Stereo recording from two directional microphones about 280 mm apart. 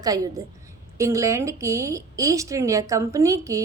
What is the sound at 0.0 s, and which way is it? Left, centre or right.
A woman's voice, centre.